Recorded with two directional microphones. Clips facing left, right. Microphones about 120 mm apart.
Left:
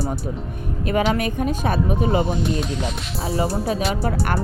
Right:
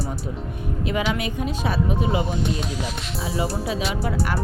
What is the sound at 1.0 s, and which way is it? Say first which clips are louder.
Speech: left 4 dB; 45° left (ahead or behind).